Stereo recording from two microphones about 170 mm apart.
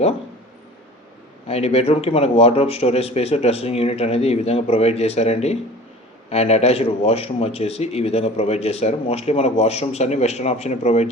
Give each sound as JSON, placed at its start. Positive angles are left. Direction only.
{"t": 1.5, "sound": "speech", "side_deg": 35}